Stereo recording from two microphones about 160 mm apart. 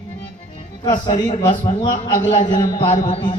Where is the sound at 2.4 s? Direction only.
30° left (ahead or behind).